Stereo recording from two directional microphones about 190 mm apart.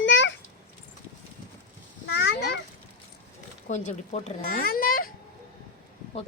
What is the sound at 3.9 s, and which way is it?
A child's voice, 45° left (ahead or behind).